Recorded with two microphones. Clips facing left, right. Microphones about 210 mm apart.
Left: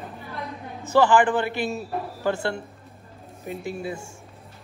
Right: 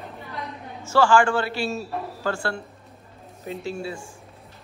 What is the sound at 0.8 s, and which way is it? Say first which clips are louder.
A man's voice: even; 20° left (ahead or behind).